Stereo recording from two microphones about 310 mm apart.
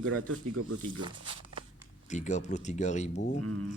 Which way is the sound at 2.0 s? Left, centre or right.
Left.